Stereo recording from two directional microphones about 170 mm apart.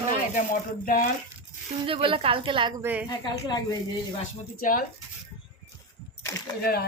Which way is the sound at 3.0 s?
25° left (ahead or behind).